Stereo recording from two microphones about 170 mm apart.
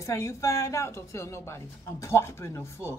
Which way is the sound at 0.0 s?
20° left (ahead or behind).